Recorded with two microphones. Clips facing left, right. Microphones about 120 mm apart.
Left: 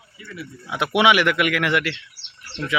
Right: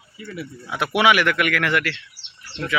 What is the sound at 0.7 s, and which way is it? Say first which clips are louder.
Speech: left 1 dB; 20° left (ahead or behind).